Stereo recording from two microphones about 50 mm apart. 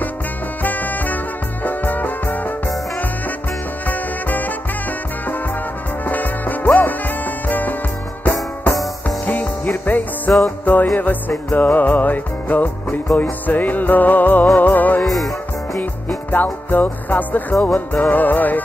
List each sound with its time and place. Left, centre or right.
0.6 s music: left
3.8 s music: left
6.0 s music: left
9.2 s music: left
15.0 s music: centre
15.8 s music: left